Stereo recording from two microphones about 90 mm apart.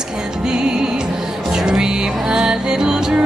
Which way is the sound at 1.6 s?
5° right (ahead or behind).